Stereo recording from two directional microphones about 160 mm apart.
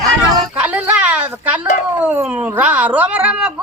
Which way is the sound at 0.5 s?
10° right (ahead or behind).